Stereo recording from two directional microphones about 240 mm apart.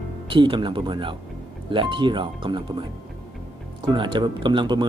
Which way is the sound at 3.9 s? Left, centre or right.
Centre.